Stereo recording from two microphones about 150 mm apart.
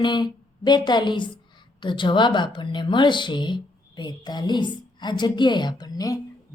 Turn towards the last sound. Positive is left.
turn(degrees=25)  # may be behind; listen again after turning